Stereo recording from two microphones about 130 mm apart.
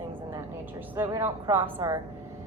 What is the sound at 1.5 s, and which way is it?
Speech, 25° right (ahead or behind).